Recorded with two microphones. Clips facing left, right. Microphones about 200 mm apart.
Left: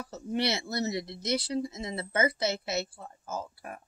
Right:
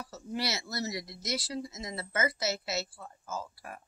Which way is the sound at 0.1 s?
25° left (ahead or behind).